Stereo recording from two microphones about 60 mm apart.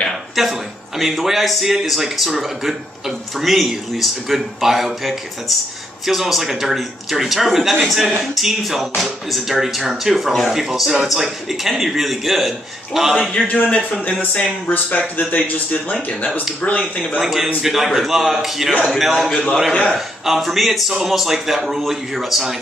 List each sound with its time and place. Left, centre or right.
0.4 s speech: centre
13.5 s speech: left
17.2 s speech: centre